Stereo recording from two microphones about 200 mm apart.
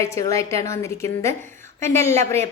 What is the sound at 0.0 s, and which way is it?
Speech, 15° left (ahead or behind).